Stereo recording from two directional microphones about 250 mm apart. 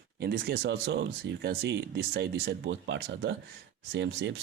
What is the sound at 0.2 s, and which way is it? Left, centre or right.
Speech, right.